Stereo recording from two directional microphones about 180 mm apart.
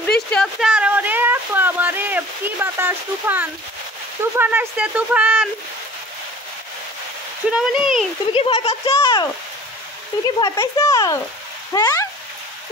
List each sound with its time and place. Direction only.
0.3 s a sound: centre (ahead or behind)
4.2 s speech: 10° right (ahead or behind)
7.5 s speech: 5° right (ahead or behind)
8.3 s speech: 30° left (ahead or behind)
10.4 s a child's voice: 20° left (ahead or behind)